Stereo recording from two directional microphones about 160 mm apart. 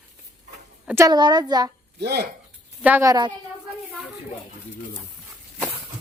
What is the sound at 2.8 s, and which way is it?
Speech, 10° right (ahead or behind).